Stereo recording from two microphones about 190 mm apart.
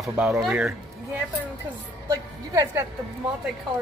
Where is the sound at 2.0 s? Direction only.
20° right (ahead or behind).